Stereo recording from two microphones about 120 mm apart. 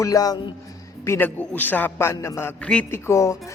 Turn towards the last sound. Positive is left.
turn(degrees=25)  # may be behind; listen again after turning